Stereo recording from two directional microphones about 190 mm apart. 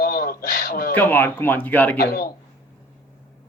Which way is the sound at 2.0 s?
55° left (ahead or behind).